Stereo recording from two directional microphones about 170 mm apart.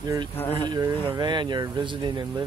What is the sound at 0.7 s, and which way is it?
Speech, 25° right (ahead or behind).